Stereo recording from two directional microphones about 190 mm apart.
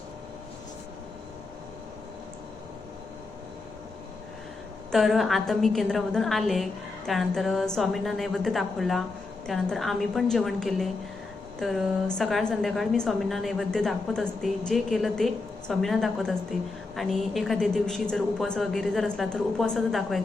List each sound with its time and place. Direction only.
4.9 s a woman's voice: centre (ahead or behind)